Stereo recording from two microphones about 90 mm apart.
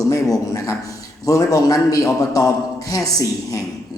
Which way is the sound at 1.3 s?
40° left (ahead or behind).